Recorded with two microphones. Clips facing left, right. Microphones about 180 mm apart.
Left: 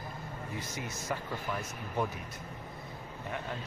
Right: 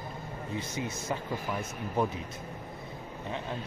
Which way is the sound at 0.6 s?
25° right (ahead or behind).